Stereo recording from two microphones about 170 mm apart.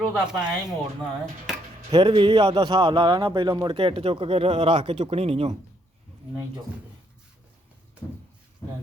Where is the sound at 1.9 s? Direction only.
30° right (ahead or behind).